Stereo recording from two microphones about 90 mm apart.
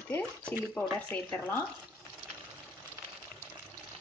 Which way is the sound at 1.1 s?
20° left (ahead or behind).